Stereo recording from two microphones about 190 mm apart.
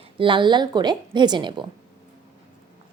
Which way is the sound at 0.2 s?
25° right (ahead or behind).